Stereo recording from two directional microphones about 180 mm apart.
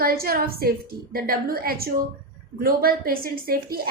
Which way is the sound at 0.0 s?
55° right (ahead or behind).